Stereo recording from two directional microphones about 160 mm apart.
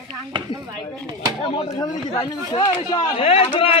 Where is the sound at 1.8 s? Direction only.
25° left (ahead or behind).